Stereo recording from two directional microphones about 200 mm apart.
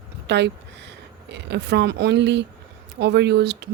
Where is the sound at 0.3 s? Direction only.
60° right (ahead or behind).